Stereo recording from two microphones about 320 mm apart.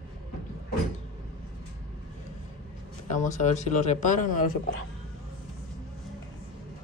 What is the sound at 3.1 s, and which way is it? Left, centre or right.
Speech, left.